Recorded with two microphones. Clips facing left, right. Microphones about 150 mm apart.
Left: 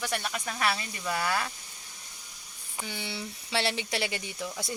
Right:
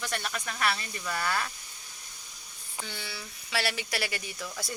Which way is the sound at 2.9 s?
20° left (ahead or behind).